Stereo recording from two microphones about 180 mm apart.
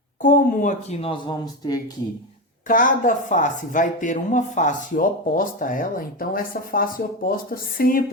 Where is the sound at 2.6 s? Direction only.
50° left (ahead or behind).